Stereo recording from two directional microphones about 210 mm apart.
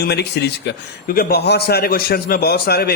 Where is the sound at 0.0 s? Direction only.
50° left (ahead or behind).